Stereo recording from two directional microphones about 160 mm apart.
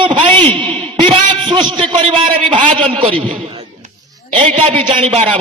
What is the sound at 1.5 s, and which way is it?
A man's voice, 30° right (ahead or behind).